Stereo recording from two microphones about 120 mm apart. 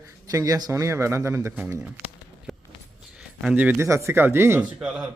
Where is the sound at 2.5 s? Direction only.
Centre (ahead or behind).